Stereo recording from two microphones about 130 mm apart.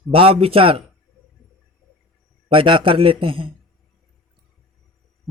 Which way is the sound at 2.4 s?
40° right (ahead or behind).